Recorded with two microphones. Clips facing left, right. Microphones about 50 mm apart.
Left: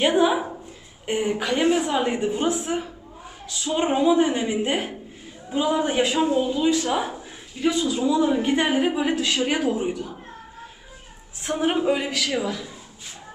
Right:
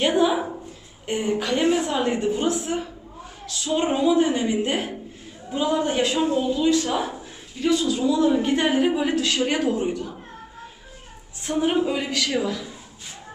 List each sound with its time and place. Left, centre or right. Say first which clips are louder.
0.0 s a woman's voice: left 1 dB; centre
0.3 s a woman's voice: right 1 dB; centre
11.4 s a woman's voice: even; centre